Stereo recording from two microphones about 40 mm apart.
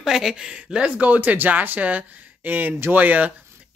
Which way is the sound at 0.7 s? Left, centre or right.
Right.